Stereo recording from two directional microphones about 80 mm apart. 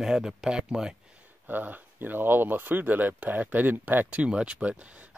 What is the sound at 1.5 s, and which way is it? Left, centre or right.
Speech, right.